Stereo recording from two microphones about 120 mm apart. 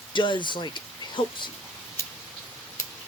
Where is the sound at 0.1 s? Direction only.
40° left (ahead or behind).